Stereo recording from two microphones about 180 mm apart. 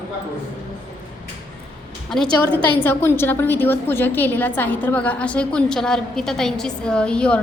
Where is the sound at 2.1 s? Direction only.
5° left (ahead or behind).